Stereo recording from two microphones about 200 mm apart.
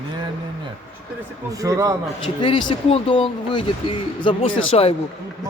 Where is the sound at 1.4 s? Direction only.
15° right (ahead or behind).